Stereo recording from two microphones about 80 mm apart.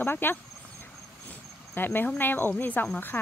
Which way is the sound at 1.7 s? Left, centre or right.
Left.